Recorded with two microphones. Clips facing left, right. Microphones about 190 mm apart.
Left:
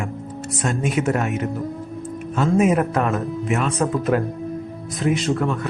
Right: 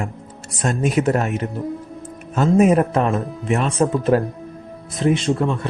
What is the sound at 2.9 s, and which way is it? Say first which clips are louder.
Speech: right 2 dB; 25° right (ahead or behind).